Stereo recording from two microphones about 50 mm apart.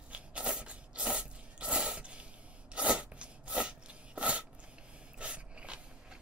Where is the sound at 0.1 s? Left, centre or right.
Right.